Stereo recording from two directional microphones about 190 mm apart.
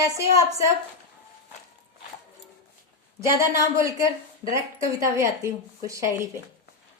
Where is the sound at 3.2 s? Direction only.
15° right (ahead or behind).